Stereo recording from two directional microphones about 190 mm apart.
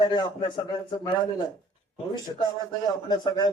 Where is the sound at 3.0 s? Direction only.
20° left (ahead or behind).